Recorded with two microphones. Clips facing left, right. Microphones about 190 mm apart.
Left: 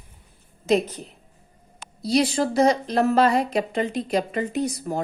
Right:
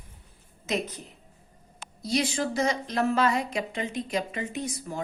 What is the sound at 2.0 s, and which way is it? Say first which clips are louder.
A woman's voice: left 6 dB; 35° left (ahead or behind).